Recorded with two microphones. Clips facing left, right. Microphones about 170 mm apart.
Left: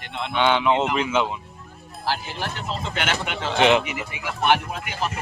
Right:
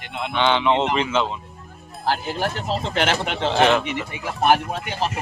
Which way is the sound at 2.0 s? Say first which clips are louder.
Right 5 dB; 50° right (ahead or behind).